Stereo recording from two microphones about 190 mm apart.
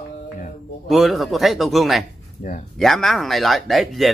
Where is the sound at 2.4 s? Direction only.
45° left (ahead or behind).